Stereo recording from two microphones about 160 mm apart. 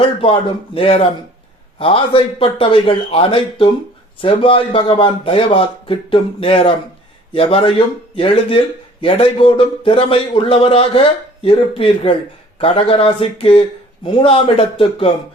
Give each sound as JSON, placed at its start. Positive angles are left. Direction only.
{"t": 0.0, "sound": "a man's voice", "side_deg": 35}